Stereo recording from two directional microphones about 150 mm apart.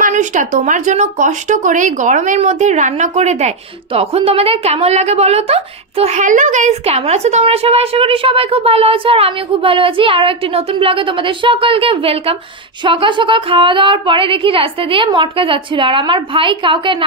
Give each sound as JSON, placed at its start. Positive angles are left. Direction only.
{"t": 0.0, "sound": "speech", "side_deg": -55}